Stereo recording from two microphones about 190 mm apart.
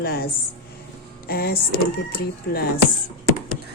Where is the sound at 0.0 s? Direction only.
55° left (ahead or behind).